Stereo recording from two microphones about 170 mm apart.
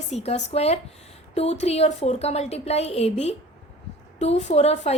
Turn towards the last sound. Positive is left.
turn(degrees=40)  # may be behind; listen again after turning